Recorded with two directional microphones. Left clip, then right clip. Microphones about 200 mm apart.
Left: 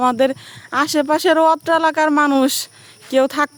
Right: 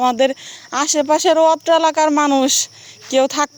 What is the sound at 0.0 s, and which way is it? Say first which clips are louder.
Speech: right 1 dB; 20° left (ahead or behind).